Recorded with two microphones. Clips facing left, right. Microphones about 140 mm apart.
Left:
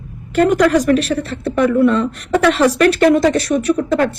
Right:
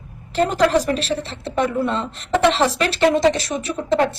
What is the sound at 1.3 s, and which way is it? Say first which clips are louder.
Speech: left 8 dB; 55° left (ahead or behind).